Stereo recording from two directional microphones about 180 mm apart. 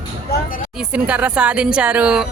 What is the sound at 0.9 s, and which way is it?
A woman's voice, 5° right (ahead or behind).